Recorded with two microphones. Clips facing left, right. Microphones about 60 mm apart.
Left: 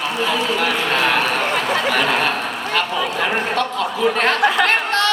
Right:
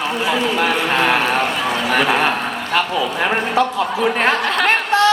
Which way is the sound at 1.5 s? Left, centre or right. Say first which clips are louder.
Left 1 dB; left.